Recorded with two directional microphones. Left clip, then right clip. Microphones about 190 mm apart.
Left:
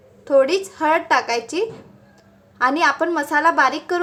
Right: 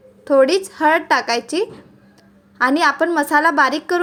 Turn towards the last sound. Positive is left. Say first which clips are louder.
# right 1 dB
turn(degrees=-20)  # may be behind; listen again after turning